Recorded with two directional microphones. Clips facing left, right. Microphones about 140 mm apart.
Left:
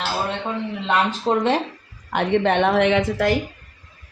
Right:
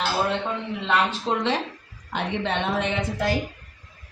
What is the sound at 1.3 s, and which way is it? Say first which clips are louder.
Speech: left 9 dB; 40° left (ahead or behind).